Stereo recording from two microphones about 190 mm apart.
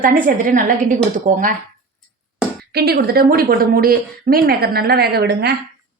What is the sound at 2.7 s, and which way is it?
A woman's voice, 55° right (ahead or behind).